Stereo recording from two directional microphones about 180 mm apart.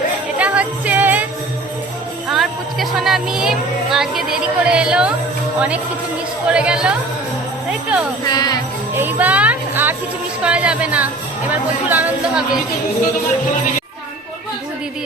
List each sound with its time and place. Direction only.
0.3 s music: 10° right (ahead or behind)
2.3 s a sound: centre (ahead or behind)
3.9 s a woman's voice: centre (ahead or behind)
7.7 s jingle bell: 5° right (ahead or behind)
8.3 s jingle bell: 20° left (ahead or behind)
9.0 s a sound: 10° right (ahead or behind)
10.4 s music: 5° right (ahead or behind)